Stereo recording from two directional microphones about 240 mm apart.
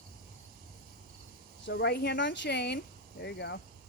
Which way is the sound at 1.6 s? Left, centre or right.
Left.